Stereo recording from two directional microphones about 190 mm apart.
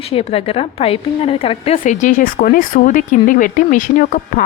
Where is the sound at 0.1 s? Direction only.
30° left (ahead or behind).